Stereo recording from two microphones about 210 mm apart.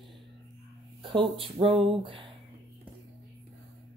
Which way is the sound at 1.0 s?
25° right (ahead or behind).